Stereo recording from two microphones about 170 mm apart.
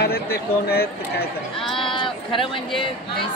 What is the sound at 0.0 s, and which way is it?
Speech, 65° left (ahead or behind).